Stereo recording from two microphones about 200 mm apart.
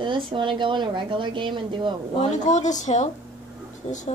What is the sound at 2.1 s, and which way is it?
Speech, 35° left (ahead or behind).